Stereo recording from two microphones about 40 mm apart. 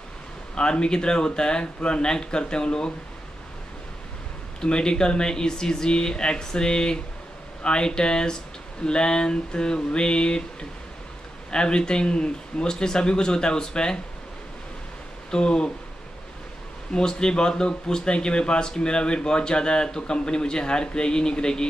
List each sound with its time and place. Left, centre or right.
0.6 s speech: left
4.6 s speech: left
15.3 s speech: left
16.9 s speech: centre